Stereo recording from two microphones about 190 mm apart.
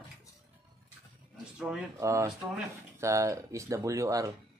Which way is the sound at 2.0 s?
15° right (ahead or behind).